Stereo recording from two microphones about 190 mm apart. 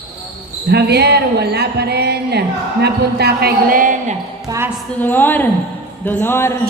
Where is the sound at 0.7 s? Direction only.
60° right (ahead or behind).